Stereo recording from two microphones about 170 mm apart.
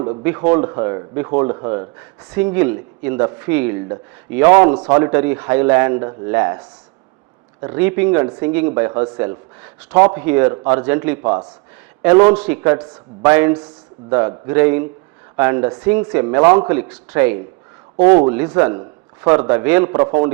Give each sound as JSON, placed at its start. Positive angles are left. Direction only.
{"t": 0.0, "sound": "speech", "side_deg": -30}
{"t": 2.3, "sound": "a man's voice", "side_deg": -10}
{"t": 3.2, "sound": "a man's voice", "side_deg": -20}
{"t": 7.8, "sound": "a man's voice", "side_deg": -10}
{"t": 11.2, "sound": "speech", "side_deg": -25}
{"t": 12.0, "sound": "a man's voice", "side_deg": -15}
{"t": 18.8, "sound": "a sound", "side_deg": -15}
{"t": 19.5, "sound": "a man's voice", "side_deg": -10}